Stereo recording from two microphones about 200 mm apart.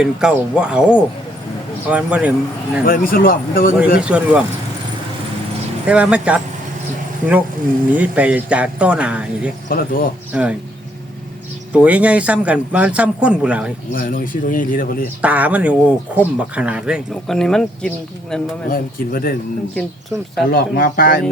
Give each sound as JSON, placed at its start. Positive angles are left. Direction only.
{"t": 0.0, "sound": "speech", "side_deg": -5}
{"t": 2.8, "sound": "a man's voice", "side_deg": 45}
{"t": 4.0, "sound": "speech", "side_deg": -5}
{"t": 5.9, "sound": "speech", "side_deg": -5}
{"t": 7.9, "sound": "speech", "side_deg": -10}
{"t": 9.6, "sound": "a man's voice", "side_deg": 45}
{"t": 10.3, "sound": "speech", "side_deg": -5}
{"t": 11.7, "sound": "speech", "side_deg": -5}
{"t": 13.9, "sound": "a man's voice", "side_deg": 45}
{"t": 15.2, "sound": "speech", "side_deg": -5}
{"t": 18.7, "sound": "a man's voice", "side_deg": 45}
{"t": 19.7, "sound": "speech", "side_deg": 0}
{"t": 20.5, "sound": "a man's voice", "side_deg": 50}